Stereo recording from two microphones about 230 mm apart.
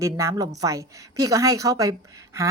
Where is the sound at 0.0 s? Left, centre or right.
Centre.